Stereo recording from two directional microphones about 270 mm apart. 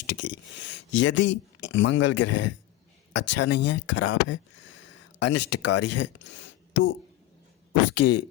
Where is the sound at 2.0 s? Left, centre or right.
Left.